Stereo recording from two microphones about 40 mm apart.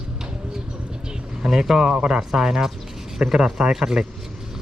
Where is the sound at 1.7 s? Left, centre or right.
Centre.